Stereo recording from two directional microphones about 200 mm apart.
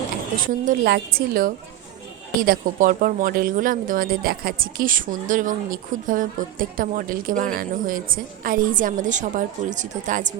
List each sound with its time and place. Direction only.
0.4 s a woman's voice: 45° right (ahead or behind)